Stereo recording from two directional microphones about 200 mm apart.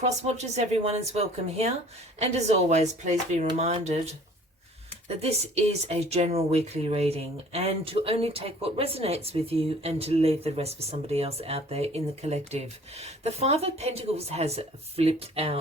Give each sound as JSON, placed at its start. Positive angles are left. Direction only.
{"t": 0.0, "sound": "speech", "side_deg": -35}